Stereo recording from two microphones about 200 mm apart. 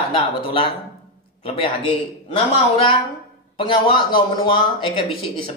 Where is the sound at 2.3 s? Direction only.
30° left (ahead or behind).